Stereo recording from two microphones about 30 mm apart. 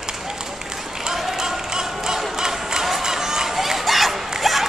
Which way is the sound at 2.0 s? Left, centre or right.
Centre.